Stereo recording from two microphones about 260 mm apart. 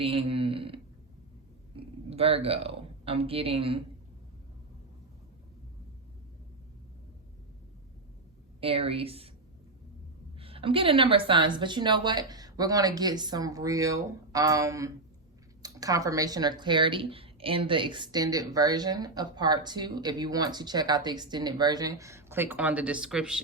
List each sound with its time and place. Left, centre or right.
0.0 s speech: right
8.6 s a woman's voice: right
10.3 s speech: right; by 23.4 s centre